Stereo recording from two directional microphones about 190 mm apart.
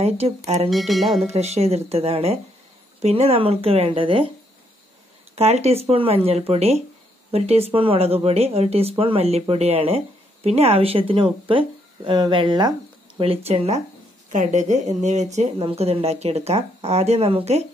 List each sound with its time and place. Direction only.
0.7 s speech: centre (ahead or behind)
1.2 s speech: 35° right (ahead or behind)
5.3 s speech: 35° right (ahead or behind)